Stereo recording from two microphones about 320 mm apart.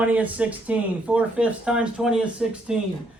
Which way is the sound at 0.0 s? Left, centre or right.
Centre.